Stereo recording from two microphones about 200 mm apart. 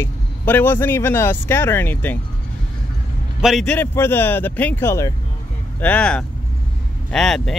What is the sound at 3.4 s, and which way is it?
Speech, centre (ahead or behind).